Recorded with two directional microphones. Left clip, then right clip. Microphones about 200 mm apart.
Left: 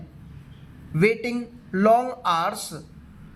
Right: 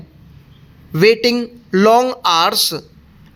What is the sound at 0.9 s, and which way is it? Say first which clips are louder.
Speech: right 10 dB; 50° right (ahead or behind).